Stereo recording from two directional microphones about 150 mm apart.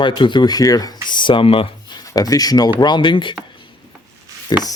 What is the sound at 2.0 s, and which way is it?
Speech, 25° left (ahead or behind).